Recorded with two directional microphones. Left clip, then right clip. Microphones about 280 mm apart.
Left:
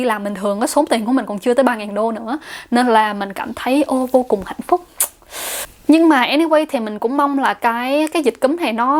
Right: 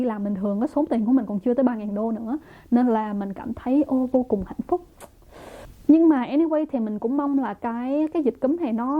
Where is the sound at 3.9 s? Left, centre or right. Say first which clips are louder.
Left 7 dB; left.